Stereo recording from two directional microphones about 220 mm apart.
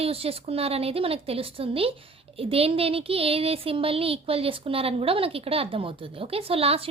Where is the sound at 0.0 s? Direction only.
25° right (ahead or behind).